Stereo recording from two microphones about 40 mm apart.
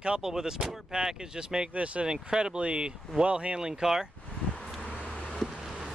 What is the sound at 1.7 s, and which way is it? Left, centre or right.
Speech, right.